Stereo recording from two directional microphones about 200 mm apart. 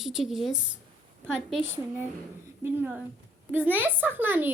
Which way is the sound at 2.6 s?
10° right (ahead or behind).